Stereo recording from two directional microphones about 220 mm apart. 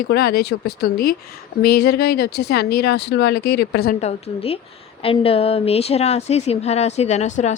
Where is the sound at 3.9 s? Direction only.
30° left (ahead or behind).